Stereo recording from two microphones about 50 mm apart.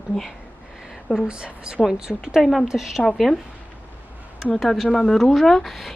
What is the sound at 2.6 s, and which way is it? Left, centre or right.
Speech, centre.